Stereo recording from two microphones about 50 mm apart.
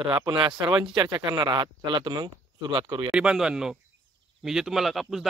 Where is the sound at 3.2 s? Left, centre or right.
Centre.